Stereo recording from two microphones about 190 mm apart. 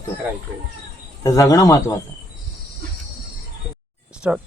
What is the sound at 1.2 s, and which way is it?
Speech, 15° left (ahead or behind).